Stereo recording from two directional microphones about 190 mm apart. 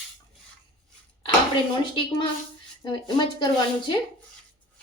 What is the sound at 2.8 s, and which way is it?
A woman's voice, 25° left (ahead or behind).